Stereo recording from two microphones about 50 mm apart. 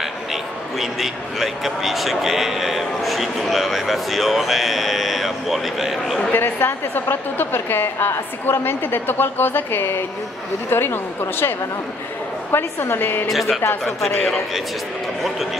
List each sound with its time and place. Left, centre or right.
0.3 s a man's voice: centre
6.3 s a woman's voice: left
13.3 s a man's voice: centre